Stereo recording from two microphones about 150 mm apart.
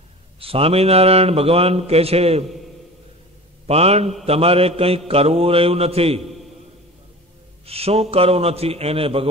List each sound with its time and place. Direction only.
0.4 s a man's voice: 40° right (ahead or behind)
3.6 s a man's voice: 45° right (ahead or behind)
7.6 s a man's voice: 40° right (ahead or behind)